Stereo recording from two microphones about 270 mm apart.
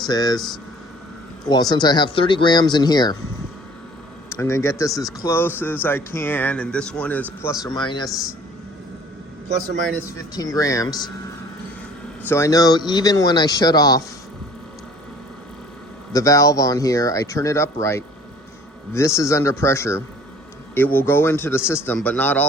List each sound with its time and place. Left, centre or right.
0.0 s speech: centre
1.7 s speech: centre
4.3 s speech: centre
7.6 s speech: centre
10.2 s speech: centre
12.3 s speech: centre
16.1 s speech: centre